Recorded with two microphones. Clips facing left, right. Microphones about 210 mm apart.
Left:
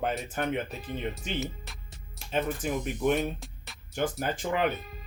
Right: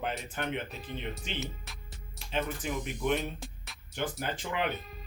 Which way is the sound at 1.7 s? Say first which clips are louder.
Left 2 dB; centre (ahead or behind).